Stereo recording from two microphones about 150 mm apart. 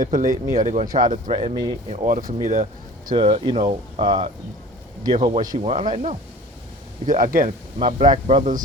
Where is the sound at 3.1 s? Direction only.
35° right (ahead or behind); by 6.1 s 50° right (ahead or behind).